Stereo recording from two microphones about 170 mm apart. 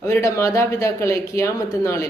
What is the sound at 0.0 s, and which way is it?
Speech, 15° left (ahead or behind).